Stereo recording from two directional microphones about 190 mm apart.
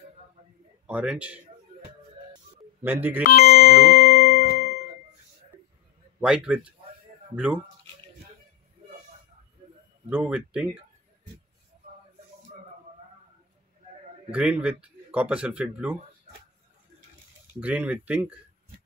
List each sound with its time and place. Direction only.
0.8 s speech: 5° right (ahead or behind)
2.8 s speech: 10° right (ahead or behind)
3.3 s music: 50° left (ahead or behind)
6.2 s speech: 5° right (ahead or behind)
10.0 s speech: 10° right (ahead or behind)
14.3 s speech: 5° right (ahead or behind)
17.6 s speech: 10° right (ahead or behind)